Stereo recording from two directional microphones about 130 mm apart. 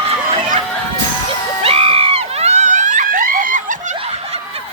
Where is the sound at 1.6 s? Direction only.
50° right (ahead or behind); by 3.7 s 90° right.